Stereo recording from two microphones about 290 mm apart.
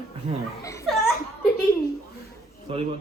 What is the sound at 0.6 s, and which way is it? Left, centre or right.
Speech, centre.